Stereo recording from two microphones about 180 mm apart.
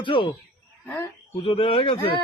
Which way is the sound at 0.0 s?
30° left (ahead or behind).